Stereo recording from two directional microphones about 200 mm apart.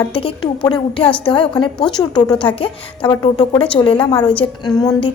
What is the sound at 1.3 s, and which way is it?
A woman's voice, 25° left (ahead or behind).